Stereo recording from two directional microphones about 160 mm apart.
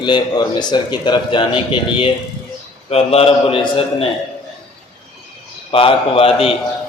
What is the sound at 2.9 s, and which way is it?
Speech, 40° left (ahead or behind).